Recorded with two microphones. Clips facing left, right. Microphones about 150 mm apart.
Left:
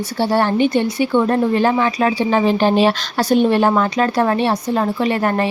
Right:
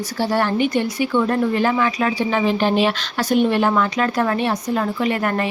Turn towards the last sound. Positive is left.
turn(degrees=30)  # may be behind; listen again after turning